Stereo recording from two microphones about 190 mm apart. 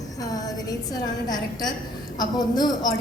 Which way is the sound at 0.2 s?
20° left (ahead or behind).